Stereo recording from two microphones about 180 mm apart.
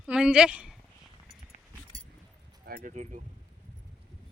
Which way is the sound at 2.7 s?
50° right (ahead or behind).